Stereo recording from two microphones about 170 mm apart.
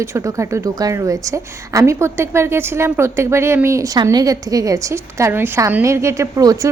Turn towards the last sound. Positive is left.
turn(degrees=-20)  # may be behind; listen again after turning